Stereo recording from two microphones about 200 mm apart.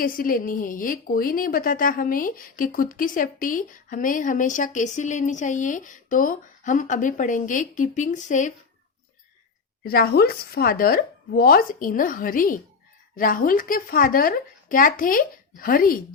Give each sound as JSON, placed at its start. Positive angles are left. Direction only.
{"t": 0.0, "sound": "a woman's voice", "side_deg": 45}
{"t": 9.8, "sound": "speech", "side_deg": 50}